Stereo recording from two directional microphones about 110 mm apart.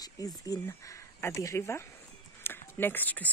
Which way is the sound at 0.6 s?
25° left (ahead or behind).